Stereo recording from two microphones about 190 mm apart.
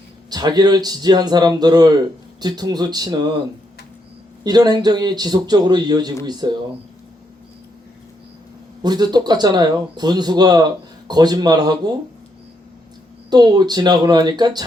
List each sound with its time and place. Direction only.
0.3 s a man's voice: 20° right (ahead or behind)
4.4 s a man's voice: 20° right (ahead or behind)
8.8 s a man's voice: 20° right (ahead or behind)
13.3 s a man's voice: 20° right (ahead or behind)